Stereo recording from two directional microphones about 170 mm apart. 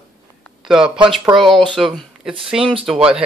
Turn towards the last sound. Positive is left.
turn(degrees=-5)  # may be behind; listen again after turning